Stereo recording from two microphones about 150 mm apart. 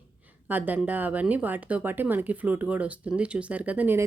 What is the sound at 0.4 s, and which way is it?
Speech, 10° right (ahead or behind).